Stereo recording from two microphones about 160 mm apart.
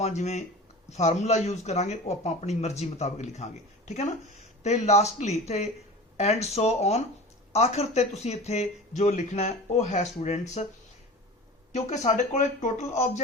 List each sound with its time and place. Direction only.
0.0 s speech: 45° left (ahead or behind)
11.7 s speech: 45° left (ahead or behind)